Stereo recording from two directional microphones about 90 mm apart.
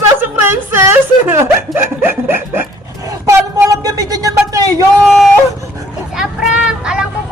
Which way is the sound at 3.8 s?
40° right (ahead or behind).